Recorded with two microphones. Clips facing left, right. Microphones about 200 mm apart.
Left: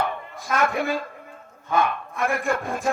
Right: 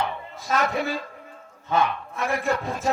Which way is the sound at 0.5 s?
50° left (ahead or behind).